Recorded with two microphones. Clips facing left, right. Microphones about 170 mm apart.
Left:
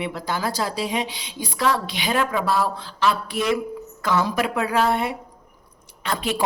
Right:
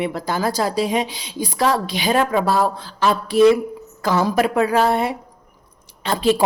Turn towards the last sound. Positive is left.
turn(degrees=-30)  # may be behind; listen again after turning